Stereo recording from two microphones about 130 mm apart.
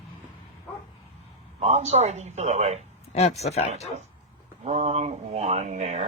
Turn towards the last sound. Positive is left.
turn(degrees=-60)  # may be behind; listen again after turning